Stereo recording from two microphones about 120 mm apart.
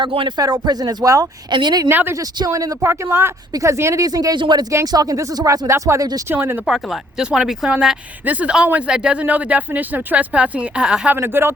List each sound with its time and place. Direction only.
0.0 s speech: 45° right (ahead or behind)
0.3 s speech: 35° right (ahead or behind)
1.9 s speech: 15° right (ahead or behind)
6.7 s speech: 5° right (ahead or behind); by 11.5 s 20° right (ahead or behind)